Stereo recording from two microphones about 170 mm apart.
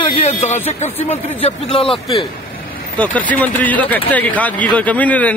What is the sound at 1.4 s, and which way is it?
Speech, 35° left (ahead or behind).